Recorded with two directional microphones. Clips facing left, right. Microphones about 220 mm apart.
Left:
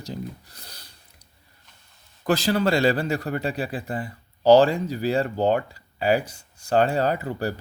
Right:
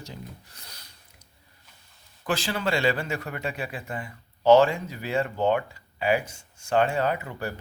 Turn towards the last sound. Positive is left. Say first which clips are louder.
# left 4 dB
turn(degrees=35)  # may be behind; listen again after turning